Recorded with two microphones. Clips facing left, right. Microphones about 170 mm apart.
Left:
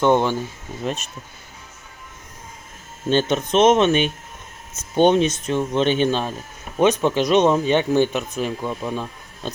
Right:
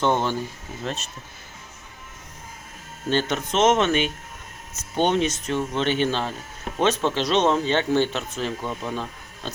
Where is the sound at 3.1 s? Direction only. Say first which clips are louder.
Left 5 dB; 20° left (ahead or behind).